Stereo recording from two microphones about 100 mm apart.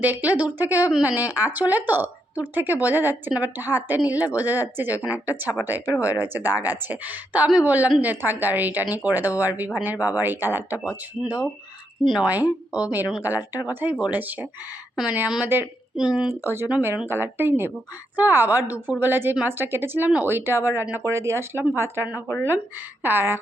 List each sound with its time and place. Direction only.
0.0 s a woman's voice: 15° right (ahead or behind)
12.0 s a woman's voice: 5° right (ahead or behind)
14.1 s a woman's voice: 15° right (ahead or behind)
16.3 s a woman's voice: 25° right (ahead or behind)
22.1 s speech: 30° left (ahead or behind)
23.0 s a woman's voice: 20° right (ahead or behind)